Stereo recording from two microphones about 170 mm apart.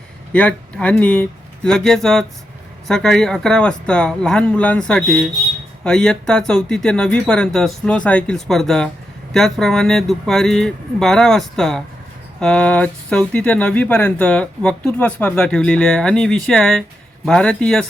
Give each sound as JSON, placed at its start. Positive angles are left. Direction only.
{"t": 0.3, "sound": "speech", "side_deg": 5}